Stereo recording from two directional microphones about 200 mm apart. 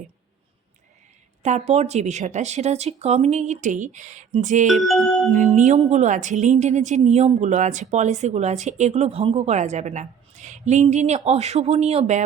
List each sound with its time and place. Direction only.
1.4 s speech: 35° right (ahead or behind)
4.7 s music: centre (ahead or behind)
5.3 s speech: 35° right (ahead or behind)